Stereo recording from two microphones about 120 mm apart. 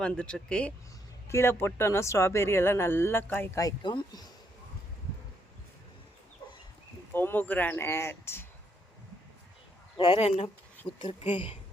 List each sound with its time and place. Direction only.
0.0 s speech: 10° left (ahead or behind)
1.3 s speech: 20° left (ahead or behind)
3.6 s speech: 35° left (ahead or behind)
7.1 s speech: 15° left (ahead or behind)
10.2 s speech: 60° left (ahead or behind)
11.0 s speech: 45° left (ahead or behind)